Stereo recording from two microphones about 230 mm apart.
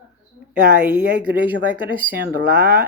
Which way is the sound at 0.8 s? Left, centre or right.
Centre.